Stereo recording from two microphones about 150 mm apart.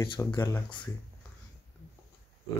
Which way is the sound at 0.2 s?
10° left (ahead or behind).